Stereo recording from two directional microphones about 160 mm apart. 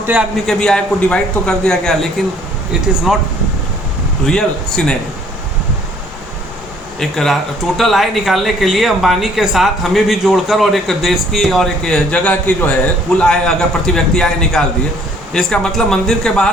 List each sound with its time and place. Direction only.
0.0 s a man's voice: 10° right (ahead or behind)
0.4 s speech: 5° left (ahead or behind)
3.1 s speech: centre (ahead or behind)
4.3 s speech: 5° left (ahead or behind)
7.0 s speech: 5° left (ahead or behind)